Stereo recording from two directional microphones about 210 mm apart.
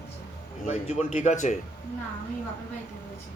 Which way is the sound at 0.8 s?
30° left (ahead or behind).